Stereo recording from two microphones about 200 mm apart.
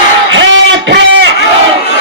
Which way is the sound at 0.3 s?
70° right (ahead or behind).